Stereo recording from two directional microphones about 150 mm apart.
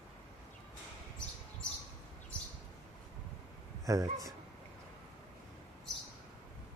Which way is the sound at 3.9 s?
20° right (ahead or behind).